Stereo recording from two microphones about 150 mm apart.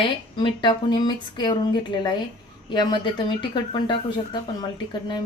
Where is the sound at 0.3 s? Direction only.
30° left (ahead or behind).